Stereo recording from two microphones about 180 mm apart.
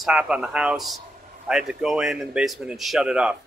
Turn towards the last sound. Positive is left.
turn(degrees=-5)  # may be behind; listen again after turning